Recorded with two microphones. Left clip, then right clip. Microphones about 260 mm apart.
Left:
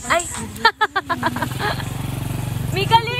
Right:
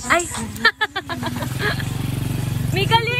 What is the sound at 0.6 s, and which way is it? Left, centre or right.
Speech, left.